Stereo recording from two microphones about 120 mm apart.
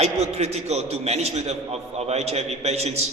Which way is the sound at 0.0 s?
65° right (ahead or behind).